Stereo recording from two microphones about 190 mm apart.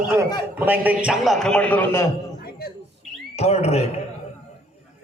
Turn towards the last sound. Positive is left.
turn(degrees=35)  # may be behind; listen again after turning